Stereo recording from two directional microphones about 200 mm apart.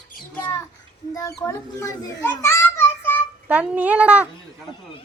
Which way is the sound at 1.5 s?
15° left (ahead or behind).